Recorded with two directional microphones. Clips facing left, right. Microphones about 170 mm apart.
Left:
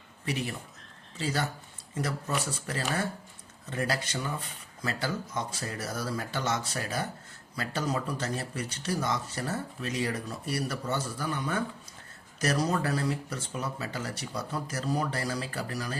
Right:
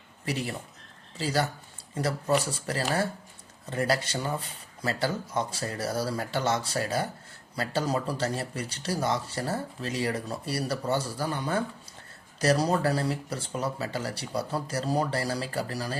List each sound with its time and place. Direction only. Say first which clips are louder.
0.3 s speech: right 1 dB; 35° right (ahead or behind)